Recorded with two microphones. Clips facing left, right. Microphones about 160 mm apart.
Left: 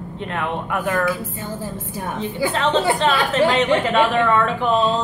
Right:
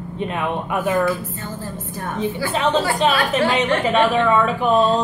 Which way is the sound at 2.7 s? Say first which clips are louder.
Left 2 dB; 20° left (ahead or behind).